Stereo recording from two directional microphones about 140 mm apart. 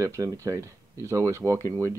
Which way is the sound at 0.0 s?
25° right (ahead or behind).